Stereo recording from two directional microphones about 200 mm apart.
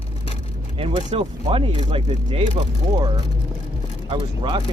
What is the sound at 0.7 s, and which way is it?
Speech, 30° right (ahead or behind).